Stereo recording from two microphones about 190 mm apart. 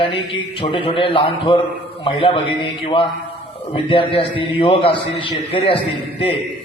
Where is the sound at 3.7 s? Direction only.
25° left (ahead or behind).